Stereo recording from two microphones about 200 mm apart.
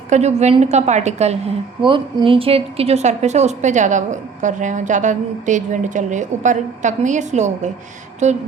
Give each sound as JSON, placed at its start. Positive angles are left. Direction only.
{"t": 0.1, "sound": "a woman's voice", "side_deg": -35}